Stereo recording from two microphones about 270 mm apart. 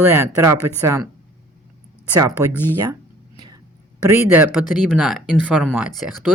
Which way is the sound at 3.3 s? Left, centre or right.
Centre.